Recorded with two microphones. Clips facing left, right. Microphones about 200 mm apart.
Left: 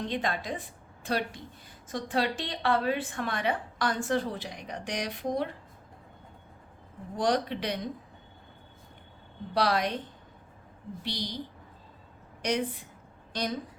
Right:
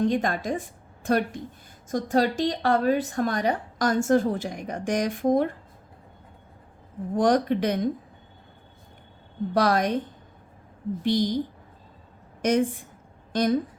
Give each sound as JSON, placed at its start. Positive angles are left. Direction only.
{"t": 0.0, "sound": "a woman's voice", "side_deg": -45}
{"t": 7.2, "sound": "a woman's voice", "side_deg": -50}
{"t": 9.6, "sound": "a woman's voice", "side_deg": -50}
{"t": 11.0, "sound": "a woman's voice", "side_deg": -50}
{"t": 12.4, "sound": "a woman's voice", "side_deg": -50}